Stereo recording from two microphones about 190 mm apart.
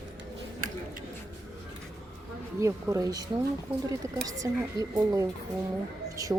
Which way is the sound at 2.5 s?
15° right (ahead or behind).